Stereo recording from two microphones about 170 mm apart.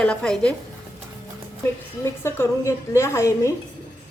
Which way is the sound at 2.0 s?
15° left (ahead or behind).